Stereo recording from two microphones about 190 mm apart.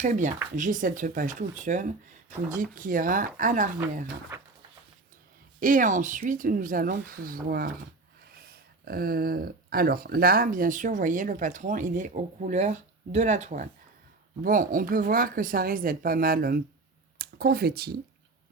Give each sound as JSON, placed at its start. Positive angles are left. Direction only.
{"t": 0.0, "sound": "speech", "side_deg": -40}
{"t": 5.5, "sound": "speech", "side_deg": -45}